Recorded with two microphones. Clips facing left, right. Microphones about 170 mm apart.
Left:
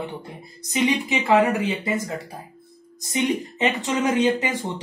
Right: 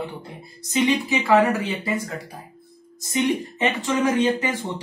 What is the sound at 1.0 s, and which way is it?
Speech, 25° left (ahead or behind).